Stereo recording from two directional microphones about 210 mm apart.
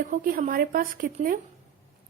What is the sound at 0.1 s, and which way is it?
A woman's voice, 40° right (ahead or behind).